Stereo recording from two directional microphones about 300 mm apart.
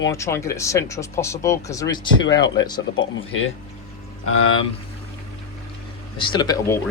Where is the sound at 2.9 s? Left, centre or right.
Left.